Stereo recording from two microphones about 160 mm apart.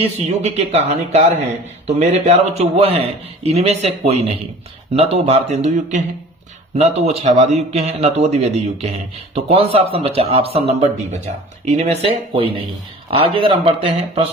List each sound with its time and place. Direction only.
0.0 s a man's voice: 40° right (ahead or behind)